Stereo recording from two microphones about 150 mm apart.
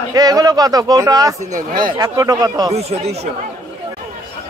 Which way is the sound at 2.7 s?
45° right (ahead or behind).